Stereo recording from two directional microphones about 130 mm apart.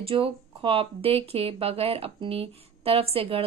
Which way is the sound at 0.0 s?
45° right (ahead or behind).